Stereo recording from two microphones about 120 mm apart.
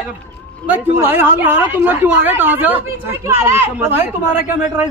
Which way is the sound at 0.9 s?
20° right (ahead or behind).